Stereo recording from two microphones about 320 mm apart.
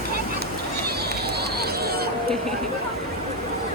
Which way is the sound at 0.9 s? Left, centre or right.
Right.